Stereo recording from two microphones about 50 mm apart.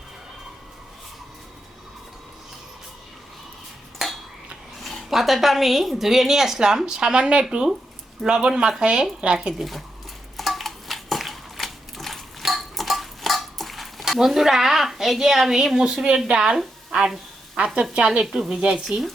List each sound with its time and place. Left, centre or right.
4.8 s a sound: centre
5.0 s a woman's voice: centre; by 9.5 s right
9.5 s a woman's voice: centre
10.3 s a sound: centre
16.4 s a woman's voice: centre
17.6 s speech: right
17.9 s a woman's voice: centre